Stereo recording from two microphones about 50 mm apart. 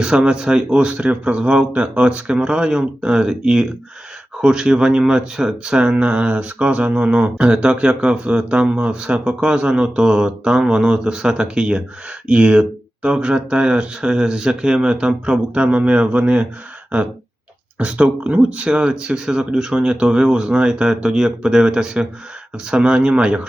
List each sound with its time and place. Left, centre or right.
0.0 s speech: centre
17.7 s speech: right